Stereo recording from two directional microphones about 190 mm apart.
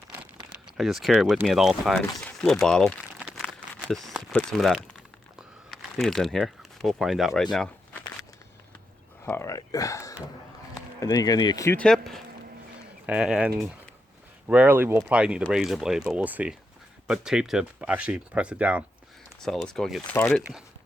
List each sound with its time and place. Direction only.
0.1 s speech: 5° right (ahead or behind)
2.1 s crumpling: 5° left (ahead or behind)
9.2 s speech: 10° left (ahead or behind)
11.8 s speech: centre (ahead or behind)